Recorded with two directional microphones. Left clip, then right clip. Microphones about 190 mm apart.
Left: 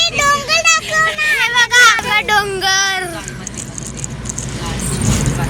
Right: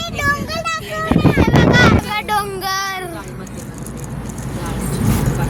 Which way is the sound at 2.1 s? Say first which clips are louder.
Left 5 dB; centre (ahead or behind).